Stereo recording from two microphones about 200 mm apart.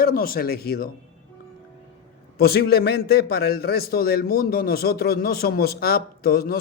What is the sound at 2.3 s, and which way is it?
A man's voice, 50° left (ahead or behind).